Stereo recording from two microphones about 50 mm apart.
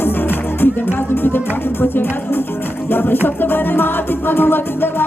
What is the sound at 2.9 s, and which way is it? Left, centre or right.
Music, left.